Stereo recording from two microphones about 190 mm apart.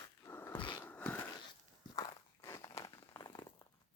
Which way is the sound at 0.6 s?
25° left (ahead or behind).